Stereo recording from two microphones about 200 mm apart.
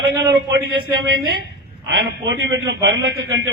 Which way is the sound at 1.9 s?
60° right (ahead or behind).